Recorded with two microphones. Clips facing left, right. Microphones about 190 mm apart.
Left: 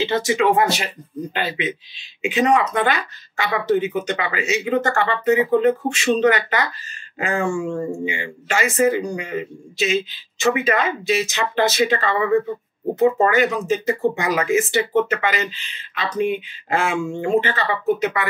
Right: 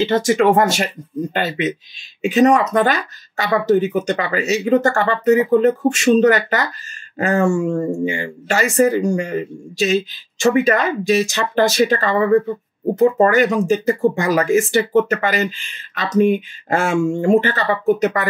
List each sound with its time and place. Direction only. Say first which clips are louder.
0.0 s speech: right 4 dB; 45° right (ahead or behind)